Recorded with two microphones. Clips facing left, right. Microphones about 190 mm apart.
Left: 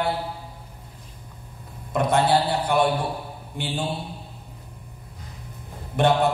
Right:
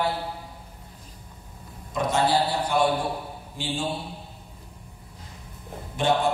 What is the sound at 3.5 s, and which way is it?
Speech, 60° left (ahead or behind).